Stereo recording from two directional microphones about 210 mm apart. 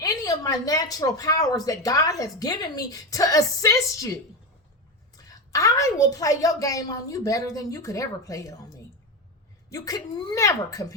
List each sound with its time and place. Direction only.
0.0 s speech: 15° left (ahead or behind)
9.6 s speech: 15° left (ahead or behind)